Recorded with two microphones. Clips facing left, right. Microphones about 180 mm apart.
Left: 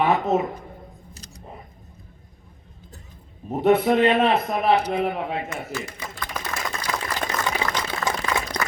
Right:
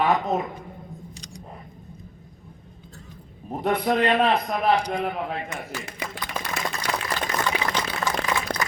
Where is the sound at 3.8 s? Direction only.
5° left (ahead or behind).